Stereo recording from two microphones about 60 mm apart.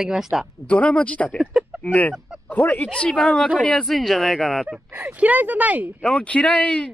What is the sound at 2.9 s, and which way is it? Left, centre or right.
Speech, centre.